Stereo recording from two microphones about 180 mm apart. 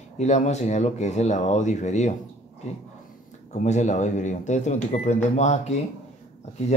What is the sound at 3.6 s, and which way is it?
Speech, 40° left (ahead or behind).